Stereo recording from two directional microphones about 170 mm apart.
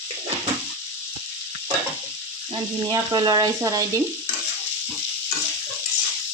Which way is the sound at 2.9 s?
25° right (ahead or behind).